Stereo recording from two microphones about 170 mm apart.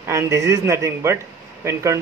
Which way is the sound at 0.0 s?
15° right (ahead or behind).